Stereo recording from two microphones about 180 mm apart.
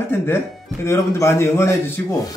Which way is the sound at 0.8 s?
15° left (ahead or behind).